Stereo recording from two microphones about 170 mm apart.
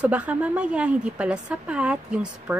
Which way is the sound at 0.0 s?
10° right (ahead or behind).